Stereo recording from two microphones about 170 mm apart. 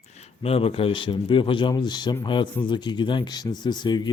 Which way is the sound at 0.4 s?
35° left (ahead or behind).